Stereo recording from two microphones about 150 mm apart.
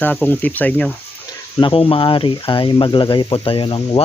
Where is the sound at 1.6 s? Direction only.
35° left (ahead or behind).